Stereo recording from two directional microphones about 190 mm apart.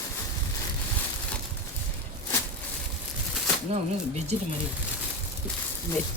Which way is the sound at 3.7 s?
35° right (ahead or behind).